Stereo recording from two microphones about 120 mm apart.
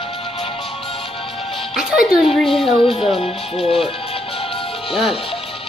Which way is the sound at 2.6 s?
50° left (ahead or behind).